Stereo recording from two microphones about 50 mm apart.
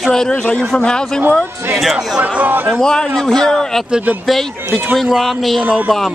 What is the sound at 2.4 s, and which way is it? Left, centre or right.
Speech, right.